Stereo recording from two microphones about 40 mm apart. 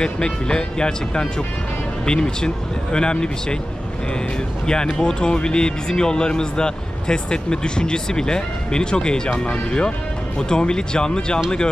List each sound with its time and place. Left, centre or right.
0.0 s speech: left
4.9 s speech: left